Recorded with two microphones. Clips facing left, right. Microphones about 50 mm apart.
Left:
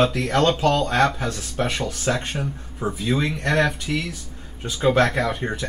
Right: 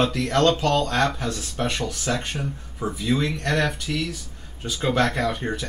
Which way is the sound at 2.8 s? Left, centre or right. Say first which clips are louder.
Left 1 dB; centre.